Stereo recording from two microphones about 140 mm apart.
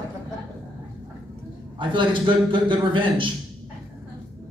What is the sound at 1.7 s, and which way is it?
A man's voice, 35° right (ahead or behind).